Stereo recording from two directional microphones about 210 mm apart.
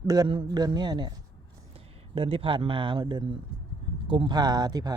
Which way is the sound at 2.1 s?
25° right (ahead or behind).